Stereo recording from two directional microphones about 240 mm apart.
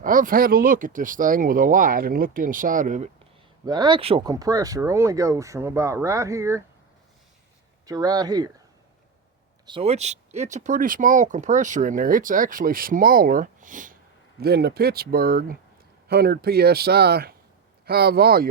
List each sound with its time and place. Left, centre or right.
0.0 s speech: right
3.7 s speech: centre
7.9 s speech: centre
9.6 s speech: right